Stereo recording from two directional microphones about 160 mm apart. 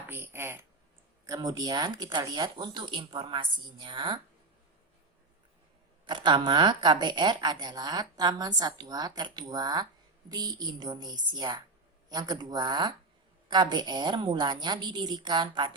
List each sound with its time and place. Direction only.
0.1 s speech: 15° right (ahead or behind); by 4.2 s 30° right (ahead or behind)
6.1 s speech: 30° right (ahead or behind)